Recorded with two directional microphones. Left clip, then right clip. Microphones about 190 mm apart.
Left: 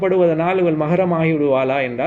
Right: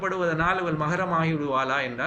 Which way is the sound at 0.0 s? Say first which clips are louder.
Left 9 dB; 20° left (ahead or behind).